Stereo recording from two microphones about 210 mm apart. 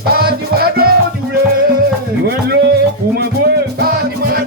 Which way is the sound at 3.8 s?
45° right (ahead or behind).